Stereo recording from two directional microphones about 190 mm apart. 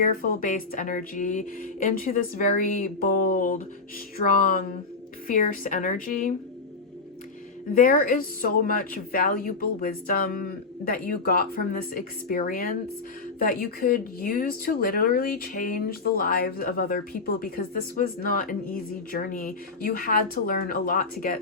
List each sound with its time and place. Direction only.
0.0 s speech: 50° left (ahead or behind)
7.7 s speech: 45° left (ahead or behind)